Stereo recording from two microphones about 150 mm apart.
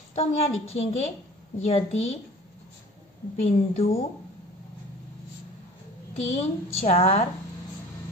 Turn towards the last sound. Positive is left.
turn(degrees=40)  # may be behind; listen again after turning